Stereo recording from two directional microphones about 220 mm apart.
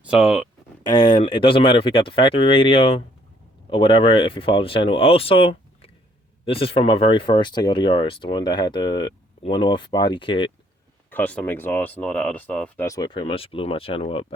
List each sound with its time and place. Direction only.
0.0 s speech: centre (ahead or behind)
0.9 s speech: 20° left (ahead or behind)
11.1 s speech: 5° left (ahead or behind); by 14.3 s 25° left (ahead or behind)